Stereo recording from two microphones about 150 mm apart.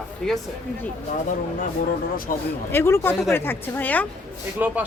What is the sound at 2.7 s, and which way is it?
Speech, 15° left (ahead or behind).